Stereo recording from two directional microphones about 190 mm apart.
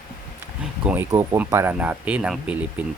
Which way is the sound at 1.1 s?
15° right (ahead or behind).